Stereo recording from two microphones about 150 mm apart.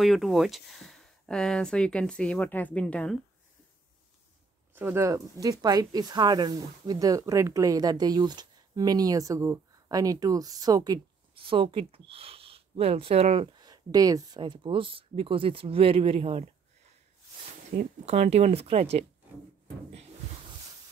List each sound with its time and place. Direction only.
0.0 s speech: centre (ahead or behind)
4.7 s speech: 15° right (ahead or behind)
11.3 s speech: 35° right (ahead or behind)
13.6 s speech: 25° right (ahead or behind)
17.7 s speech: 45° right (ahead or behind)